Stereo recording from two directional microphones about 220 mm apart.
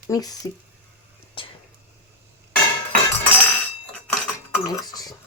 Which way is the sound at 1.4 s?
25° left (ahead or behind).